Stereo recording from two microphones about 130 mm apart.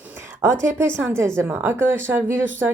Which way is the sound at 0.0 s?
15° right (ahead or behind).